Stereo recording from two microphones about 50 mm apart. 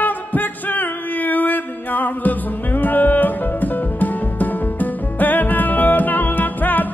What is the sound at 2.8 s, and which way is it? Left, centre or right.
Music, left.